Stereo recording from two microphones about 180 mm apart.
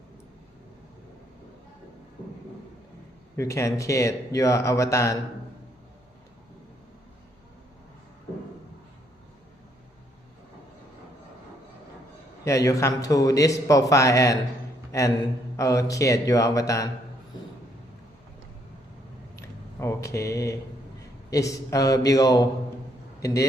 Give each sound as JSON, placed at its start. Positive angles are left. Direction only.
{"t": 3.3, "sound": "a man's voice", "side_deg": 15}
{"t": 12.5, "sound": "a man's voice", "side_deg": 15}
{"t": 19.4, "sound": "a man's voice", "side_deg": 15}